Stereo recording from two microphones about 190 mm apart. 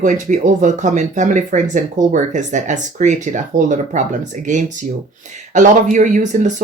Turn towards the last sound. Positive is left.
turn(degrees=-40)  # may be behind; listen again after turning